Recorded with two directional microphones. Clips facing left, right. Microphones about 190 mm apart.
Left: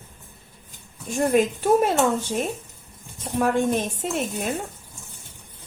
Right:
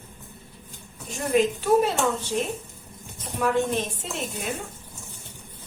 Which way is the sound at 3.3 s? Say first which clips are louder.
Left 3 dB; 50° left (ahead or behind).